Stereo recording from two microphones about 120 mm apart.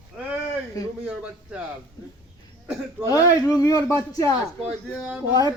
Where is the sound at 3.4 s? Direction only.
30° left (ahead or behind).